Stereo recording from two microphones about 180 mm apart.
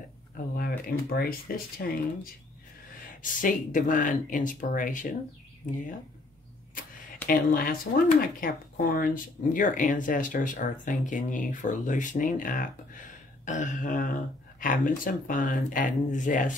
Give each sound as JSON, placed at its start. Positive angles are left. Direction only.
{"t": 0.6, "sound": "speech", "side_deg": 55}
{"t": 3.2, "sound": "speech", "side_deg": 45}
{"t": 7.2, "sound": "speech", "side_deg": 50}